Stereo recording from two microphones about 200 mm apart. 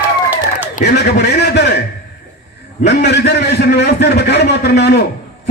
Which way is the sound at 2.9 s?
55° left (ahead or behind).